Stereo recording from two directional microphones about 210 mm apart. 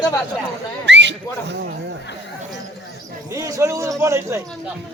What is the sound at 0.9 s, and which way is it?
Speech, 55° right (ahead or behind).